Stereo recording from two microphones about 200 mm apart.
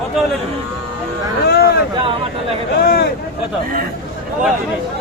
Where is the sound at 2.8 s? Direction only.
45° left (ahead or behind).